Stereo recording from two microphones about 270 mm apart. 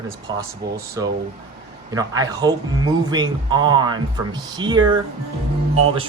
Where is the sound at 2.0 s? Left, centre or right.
Centre.